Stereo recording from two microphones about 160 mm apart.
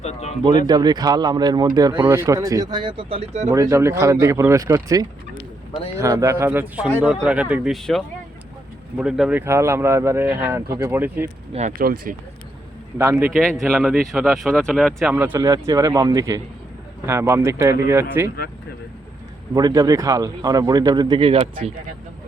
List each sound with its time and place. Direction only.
0.0 s a sound: 45° left (ahead or behind)
0.7 s a man's voice: 25° right (ahead or behind); by 3.5 s 40° right (ahead or behind)
3.5 s speech: 20° right (ahead or behind); by 9.4 s 5° right (ahead or behind)
9.4 s speech: 15° right (ahead or behind)
11.8 s speech: 65° right (ahead or behind)
13.0 s speech: 15° right (ahead or behind)
13.4 s speech: 5° left (ahead or behind)
15.1 s speech: 10° right (ahead or behind)
15.4 s a man's voice: 20° right (ahead or behind)
19.5 s a man's voice: 20° right (ahead or behind); by 21.7 s 40° right (ahead or behind)